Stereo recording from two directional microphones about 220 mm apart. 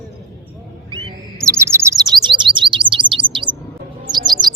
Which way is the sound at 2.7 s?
20° right (ahead or behind).